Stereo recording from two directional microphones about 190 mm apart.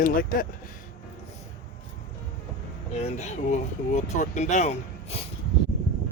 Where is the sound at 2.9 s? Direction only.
35° left (ahead or behind).